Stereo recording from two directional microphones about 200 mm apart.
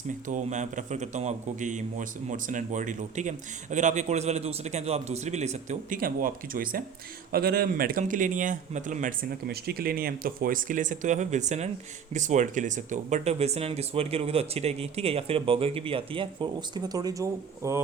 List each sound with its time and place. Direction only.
0.3 s a man's voice: 40° right (ahead or behind); by 17.8 s 15° right (ahead or behind)